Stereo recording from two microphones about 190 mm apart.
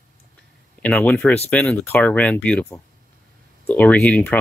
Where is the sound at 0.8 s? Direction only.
10° left (ahead or behind).